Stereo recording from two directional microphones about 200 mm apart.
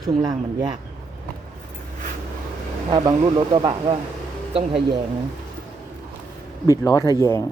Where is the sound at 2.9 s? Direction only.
25° right (ahead or behind).